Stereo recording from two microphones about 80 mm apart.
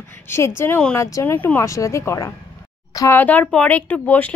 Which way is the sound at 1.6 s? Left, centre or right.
Left.